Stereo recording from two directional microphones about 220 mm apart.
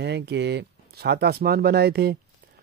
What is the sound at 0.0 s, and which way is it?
Speech, 50° right (ahead or behind).